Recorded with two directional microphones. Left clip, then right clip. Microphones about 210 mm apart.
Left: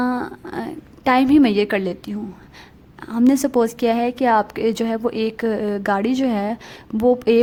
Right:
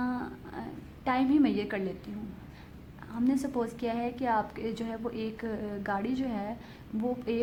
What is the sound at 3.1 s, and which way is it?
A woman's voice, 45° left (ahead or behind).